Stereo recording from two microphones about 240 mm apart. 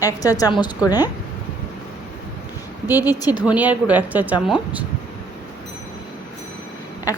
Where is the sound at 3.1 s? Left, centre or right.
Centre.